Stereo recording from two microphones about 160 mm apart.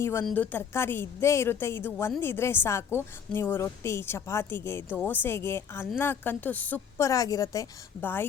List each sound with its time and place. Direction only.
0.0 s a woman's voice: 15° left (ahead or behind)